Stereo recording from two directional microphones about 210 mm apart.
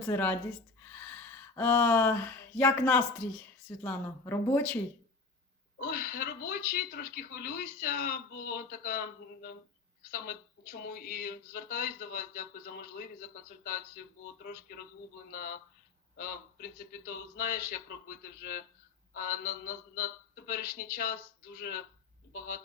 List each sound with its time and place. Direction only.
0.0 s speech: 10° left (ahead or behind)
5.8 s speech: 45° left (ahead or behind)